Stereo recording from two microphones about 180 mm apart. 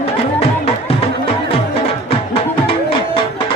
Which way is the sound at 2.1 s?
30° left (ahead or behind).